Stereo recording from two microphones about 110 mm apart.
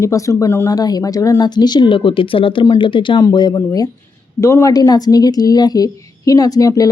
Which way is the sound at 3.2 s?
35° left (ahead or behind).